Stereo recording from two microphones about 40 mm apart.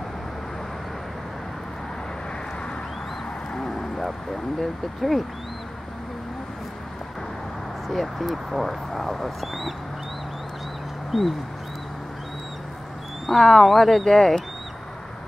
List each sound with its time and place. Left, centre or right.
3.5 s a sound: centre
4.6 s speech: centre
7.9 s speech: centre
11.1 s bird: centre
13.3 s speech: centre